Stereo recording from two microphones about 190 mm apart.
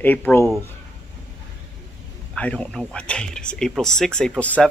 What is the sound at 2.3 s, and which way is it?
Speech, 5° left (ahead or behind).